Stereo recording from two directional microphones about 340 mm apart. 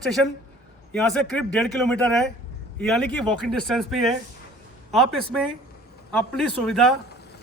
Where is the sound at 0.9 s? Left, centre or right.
Centre.